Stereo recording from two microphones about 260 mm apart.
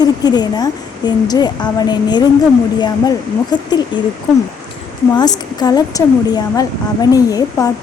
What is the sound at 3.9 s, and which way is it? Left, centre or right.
Speech, centre.